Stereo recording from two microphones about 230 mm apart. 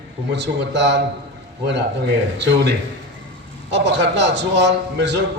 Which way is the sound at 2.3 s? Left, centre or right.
Right.